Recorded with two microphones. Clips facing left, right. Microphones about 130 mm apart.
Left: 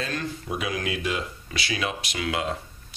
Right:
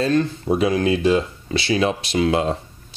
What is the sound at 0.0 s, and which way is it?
Speech, 30° right (ahead or behind).